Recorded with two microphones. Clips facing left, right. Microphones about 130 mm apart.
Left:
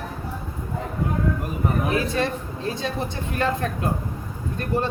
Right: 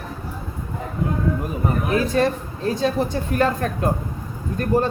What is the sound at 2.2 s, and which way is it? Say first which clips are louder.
A woman's voice: right 5 dB; 40° right (ahead or behind).